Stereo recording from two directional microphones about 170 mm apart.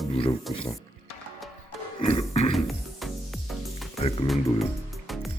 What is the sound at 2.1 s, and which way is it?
Music, 35° left (ahead or behind).